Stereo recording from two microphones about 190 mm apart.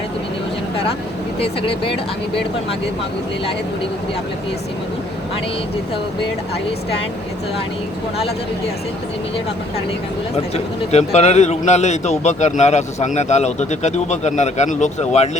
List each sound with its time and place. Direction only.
1.6 s speech: 30° left (ahead or behind)
10.3 s a man's voice: 35° left (ahead or behind)